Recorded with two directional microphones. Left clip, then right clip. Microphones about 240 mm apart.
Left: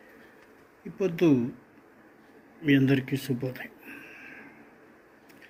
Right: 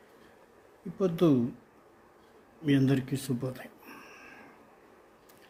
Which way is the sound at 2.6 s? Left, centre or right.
Centre.